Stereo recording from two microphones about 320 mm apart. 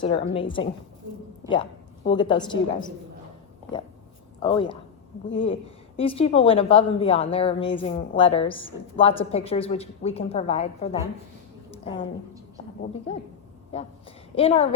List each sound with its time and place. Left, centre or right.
0.0 s a woman's voice: centre
2.0 s a woman's voice: centre
4.4 s a woman's voice: centre
13.1 s a woman's voice: centre
14.3 s a woman's voice: centre